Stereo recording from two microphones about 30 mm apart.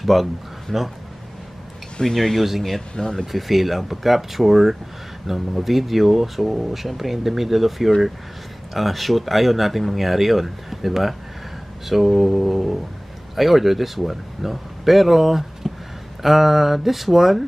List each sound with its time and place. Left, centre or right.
0.0 s speech: centre
0.7 s speech: centre
2.1 s speech: centre
3.0 s speech: centre
3.3 s a man's voice: centre